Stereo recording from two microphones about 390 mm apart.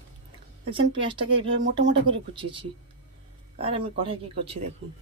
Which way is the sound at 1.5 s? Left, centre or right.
Right.